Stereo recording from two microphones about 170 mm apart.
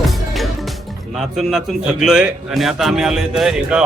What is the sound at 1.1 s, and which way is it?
A man's voice, centre (ahead or behind).